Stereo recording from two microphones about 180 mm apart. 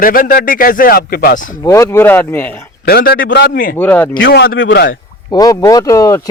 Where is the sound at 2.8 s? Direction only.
60° left (ahead or behind).